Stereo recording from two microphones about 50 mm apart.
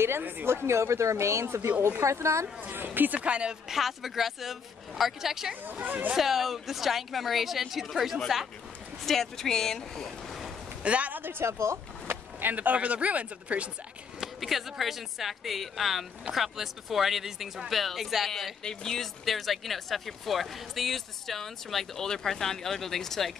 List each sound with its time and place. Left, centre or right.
0.7 s speech: right
2.6 s speech: right
3.2 s speech: centre
3.6 s speech: centre
5.9 s speech: right
6.1 s speech: centre
10.8 s a man's voice: right
11.1 s speech: right
11.4 s speech: right
12.1 s speech: right
14.2 s speech: centre
18.6 s speech: centre
19.2 s speech: centre